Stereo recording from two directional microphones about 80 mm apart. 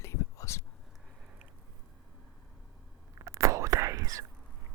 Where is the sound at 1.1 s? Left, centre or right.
Centre.